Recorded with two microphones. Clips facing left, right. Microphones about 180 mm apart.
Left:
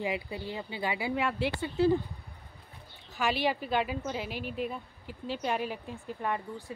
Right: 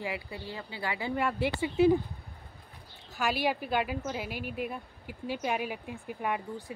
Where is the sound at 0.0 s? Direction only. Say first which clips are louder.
Left 3 dB; 20° left (ahead or behind).